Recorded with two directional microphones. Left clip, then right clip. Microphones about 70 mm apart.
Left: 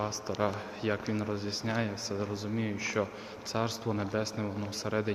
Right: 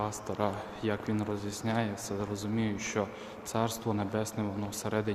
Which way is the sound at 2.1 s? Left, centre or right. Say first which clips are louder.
Left 1 dB; right.